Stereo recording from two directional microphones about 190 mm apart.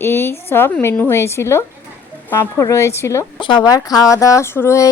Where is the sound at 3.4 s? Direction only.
25° left (ahead or behind).